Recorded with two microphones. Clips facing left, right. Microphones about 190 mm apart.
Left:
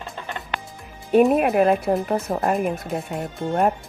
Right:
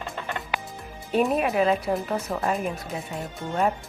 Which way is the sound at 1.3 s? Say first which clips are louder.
Left 5 dB; 55° left (ahead or behind).